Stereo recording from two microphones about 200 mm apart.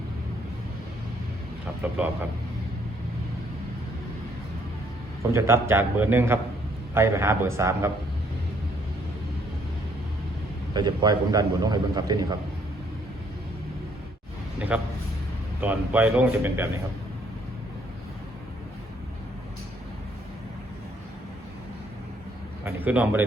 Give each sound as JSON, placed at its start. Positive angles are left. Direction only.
{"t": 1.8, "sound": "a man's voice", "side_deg": -5}
{"t": 5.3, "sound": "a man's voice", "side_deg": -15}
{"t": 10.8, "sound": "a man's voice", "side_deg": -20}
{"t": 14.7, "sound": "a man's voice", "side_deg": -5}
{"t": 22.6, "sound": "a man's voice", "side_deg": -10}